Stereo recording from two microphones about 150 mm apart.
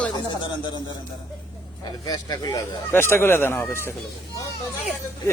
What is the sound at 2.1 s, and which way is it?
Speech, 25° left (ahead or behind).